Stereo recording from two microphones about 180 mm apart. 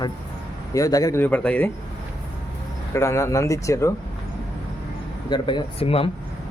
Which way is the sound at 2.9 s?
15° left (ahead or behind).